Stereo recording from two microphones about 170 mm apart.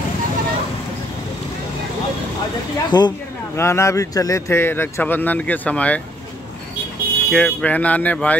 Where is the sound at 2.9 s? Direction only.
25° left (ahead or behind).